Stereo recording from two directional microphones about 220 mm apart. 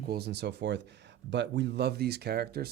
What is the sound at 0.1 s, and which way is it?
Speech, 50° right (ahead or behind).